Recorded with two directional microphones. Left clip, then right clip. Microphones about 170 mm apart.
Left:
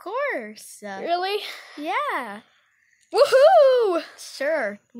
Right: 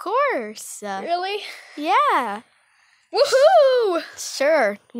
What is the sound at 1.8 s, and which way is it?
Speech, 50° right (ahead or behind).